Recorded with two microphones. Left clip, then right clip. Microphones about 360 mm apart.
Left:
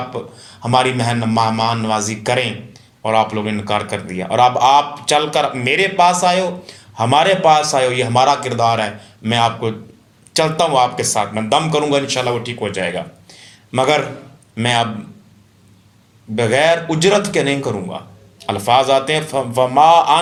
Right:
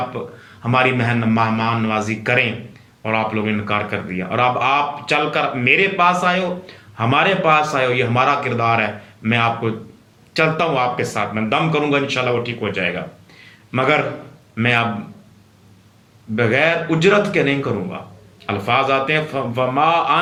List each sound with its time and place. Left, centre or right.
0.6 s a man's voice: centre
16.3 s a man's voice: centre